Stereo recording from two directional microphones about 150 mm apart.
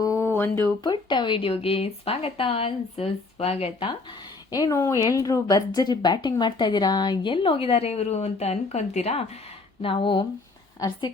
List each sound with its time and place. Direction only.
0.0 s a sound: 20° left (ahead or behind)
0.9 s speech: 30° left (ahead or behind)
4.5 s a woman's voice: 20° left (ahead or behind)